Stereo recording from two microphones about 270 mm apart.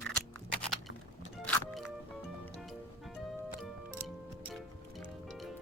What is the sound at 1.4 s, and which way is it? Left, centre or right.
Music, centre.